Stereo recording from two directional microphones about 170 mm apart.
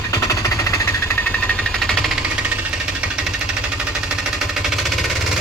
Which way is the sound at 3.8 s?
5° right (ahead or behind).